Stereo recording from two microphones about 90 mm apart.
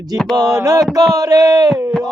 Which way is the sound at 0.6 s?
40° right (ahead or behind).